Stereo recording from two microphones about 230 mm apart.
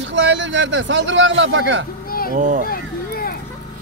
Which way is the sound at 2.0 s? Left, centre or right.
Left.